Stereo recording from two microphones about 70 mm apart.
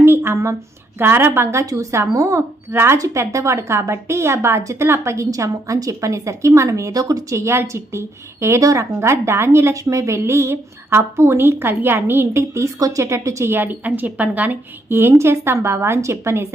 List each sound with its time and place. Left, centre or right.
0.0 s a sound: right
0.9 s a woman's voice: right
2.7 s a woman's voice: right